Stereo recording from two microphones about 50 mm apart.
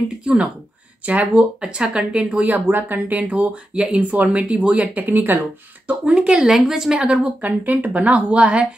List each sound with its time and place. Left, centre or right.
0.2 s speech: right
2.4 s speech: right
3.2 s speech: right
5.0 s speech: right
6.0 s a woman's voice: centre
7.4 s speech: right